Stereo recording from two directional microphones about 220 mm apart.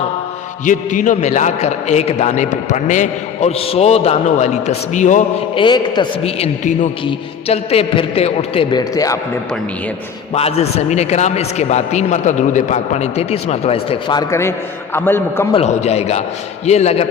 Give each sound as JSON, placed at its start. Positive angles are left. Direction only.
{"t": 0.6, "sound": "a man's voice", "side_deg": 35}
{"t": 5.5, "sound": "a man's voice", "side_deg": 20}
{"t": 10.3, "sound": "a man's voice", "side_deg": 30}
{"t": 15.5, "sound": "a man's voice", "side_deg": 30}